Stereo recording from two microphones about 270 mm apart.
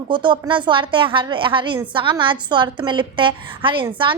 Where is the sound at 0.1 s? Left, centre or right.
Centre.